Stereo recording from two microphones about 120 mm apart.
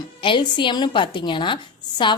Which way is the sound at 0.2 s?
45° left (ahead or behind).